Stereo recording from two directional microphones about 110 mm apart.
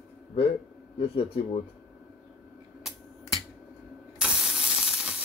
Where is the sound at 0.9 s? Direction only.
60° left (ahead or behind).